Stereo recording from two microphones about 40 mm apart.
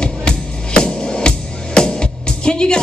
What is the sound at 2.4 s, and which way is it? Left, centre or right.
Music, left.